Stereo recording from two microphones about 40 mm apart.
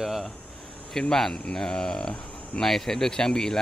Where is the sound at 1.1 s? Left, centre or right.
Centre.